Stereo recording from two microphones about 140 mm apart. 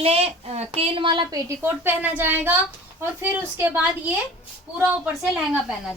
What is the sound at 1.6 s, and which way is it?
A woman's voice, 15° right (ahead or behind).